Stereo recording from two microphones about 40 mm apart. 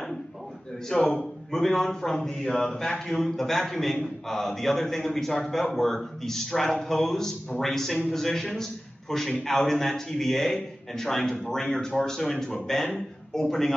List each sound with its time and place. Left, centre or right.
0.8 s a man's voice: centre